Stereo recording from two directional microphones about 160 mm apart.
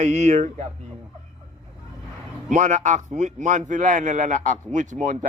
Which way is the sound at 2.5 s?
50° right (ahead or behind).